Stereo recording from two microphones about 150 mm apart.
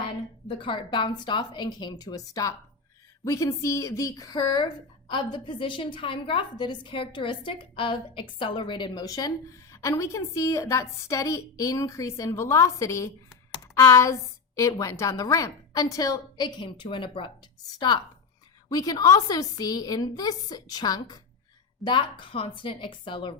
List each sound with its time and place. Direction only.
0.4 s a woman's voice: 35° left (ahead or behind)